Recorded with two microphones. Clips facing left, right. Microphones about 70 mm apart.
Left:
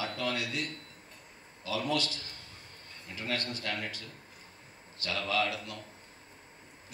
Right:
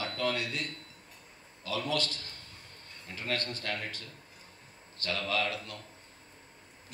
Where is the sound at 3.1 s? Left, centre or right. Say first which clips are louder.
Even; right.